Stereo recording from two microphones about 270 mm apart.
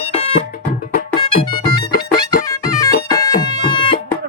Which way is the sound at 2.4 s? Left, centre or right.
Centre.